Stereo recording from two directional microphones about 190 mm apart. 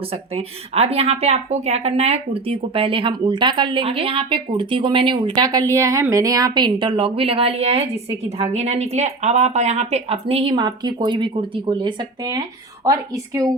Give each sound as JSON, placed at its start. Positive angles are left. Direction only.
{"t": 0.3, "sound": "a woman's voice", "side_deg": -30}